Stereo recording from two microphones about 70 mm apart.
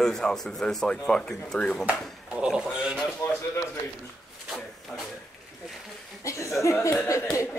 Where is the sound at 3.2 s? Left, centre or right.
Left.